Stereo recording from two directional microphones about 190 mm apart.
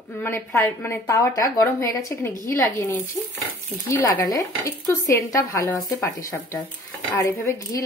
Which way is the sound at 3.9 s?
15° left (ahead or behind).